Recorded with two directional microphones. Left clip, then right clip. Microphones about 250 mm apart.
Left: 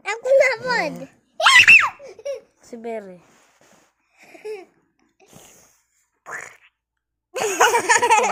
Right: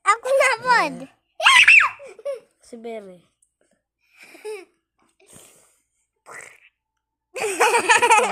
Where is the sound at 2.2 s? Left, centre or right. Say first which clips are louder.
Even; centre.